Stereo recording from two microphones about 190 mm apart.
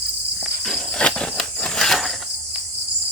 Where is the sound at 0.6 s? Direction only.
5° left (ahead or behind).